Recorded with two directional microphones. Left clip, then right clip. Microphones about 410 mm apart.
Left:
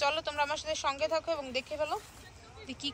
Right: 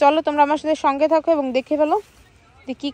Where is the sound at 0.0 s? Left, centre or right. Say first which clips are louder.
Right 15 dB; centre.